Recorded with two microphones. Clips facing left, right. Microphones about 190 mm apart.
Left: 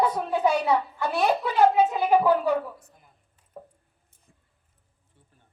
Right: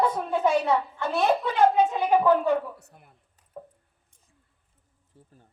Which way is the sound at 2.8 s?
65° right (ahead or behind).